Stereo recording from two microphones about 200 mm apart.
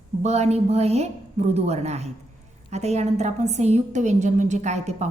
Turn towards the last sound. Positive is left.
turn(degrees=-35)  # may be behind; listen again after turning